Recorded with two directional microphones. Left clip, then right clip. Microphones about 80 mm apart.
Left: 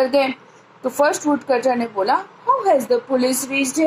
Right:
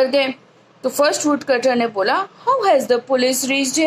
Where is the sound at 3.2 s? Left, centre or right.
Right.